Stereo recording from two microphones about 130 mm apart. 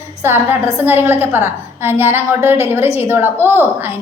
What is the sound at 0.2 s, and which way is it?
A woman's voice, 15° right (ahead or behind).